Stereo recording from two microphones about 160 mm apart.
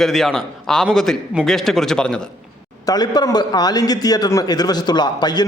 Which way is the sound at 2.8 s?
25° left (ahead or behind).